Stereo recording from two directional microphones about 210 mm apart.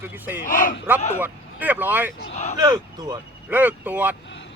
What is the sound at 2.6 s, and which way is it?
Speech, 20° right (ahead or behind).